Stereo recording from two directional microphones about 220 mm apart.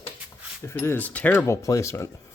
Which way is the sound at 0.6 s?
10° left (ahead or behind).